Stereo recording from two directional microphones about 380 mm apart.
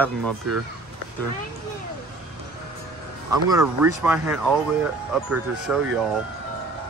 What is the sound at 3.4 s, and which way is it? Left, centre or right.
Speech, centre.